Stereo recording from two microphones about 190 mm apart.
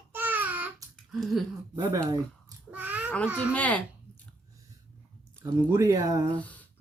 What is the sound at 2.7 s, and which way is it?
Babbling, 10° right (ahead or behind).